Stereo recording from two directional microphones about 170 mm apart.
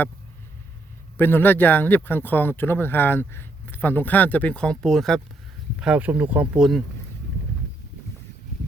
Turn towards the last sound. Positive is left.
turn(degrees=-5)  # may be behind; listen again after turning